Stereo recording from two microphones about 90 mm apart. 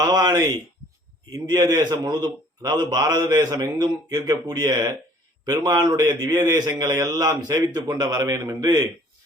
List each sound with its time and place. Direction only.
0.0 s a man's voice: 45° right (ahead or behind)